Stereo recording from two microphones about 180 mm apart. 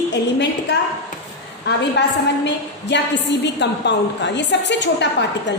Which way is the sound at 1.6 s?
75° left (ahead or behind).